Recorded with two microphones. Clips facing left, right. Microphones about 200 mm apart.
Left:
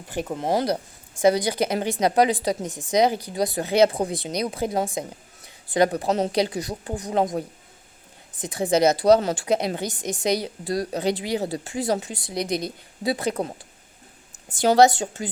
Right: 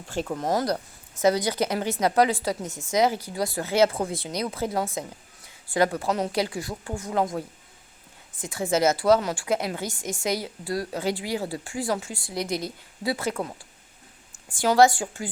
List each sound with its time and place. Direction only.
0.1 s a woman's voice: 20° left (ahead or behind)
1.2 s a woman's voice: 15° left (ahead or behind)
8.4 s a woman's voice: 20° left (ahead or behind)
13.3 s a woman's voice: 30° left (ahead or behind)